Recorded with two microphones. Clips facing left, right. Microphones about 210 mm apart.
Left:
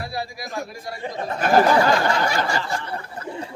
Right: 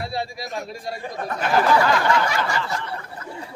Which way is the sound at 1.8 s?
30° left (ahead or behind).